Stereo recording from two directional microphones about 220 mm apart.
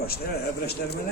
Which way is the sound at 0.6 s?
45° left (ahead or behind).